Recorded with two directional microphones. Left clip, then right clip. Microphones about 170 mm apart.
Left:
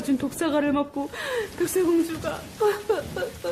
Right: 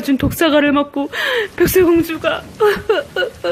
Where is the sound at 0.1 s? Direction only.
20° right (ahead or behind).